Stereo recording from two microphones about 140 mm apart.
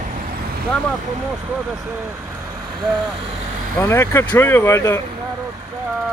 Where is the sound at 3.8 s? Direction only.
20° left (ahead or behind).